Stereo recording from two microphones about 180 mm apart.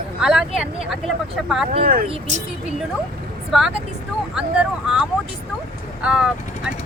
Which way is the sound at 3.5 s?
Centre (ahead or behind).